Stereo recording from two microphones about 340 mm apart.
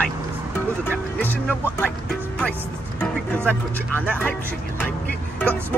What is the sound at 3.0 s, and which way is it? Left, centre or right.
Speech, centre.